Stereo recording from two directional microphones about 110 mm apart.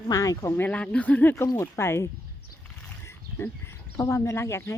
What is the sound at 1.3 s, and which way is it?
Speech, 25° left (ahead or behind).